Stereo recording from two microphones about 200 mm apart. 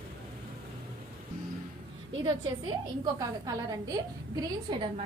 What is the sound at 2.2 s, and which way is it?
A woman's voice, 25° right (ahead or behind).